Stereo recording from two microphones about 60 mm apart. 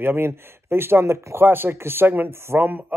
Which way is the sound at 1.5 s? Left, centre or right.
Right.